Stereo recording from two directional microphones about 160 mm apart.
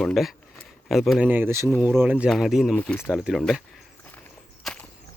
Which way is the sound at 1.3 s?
15° right (ahead or behind).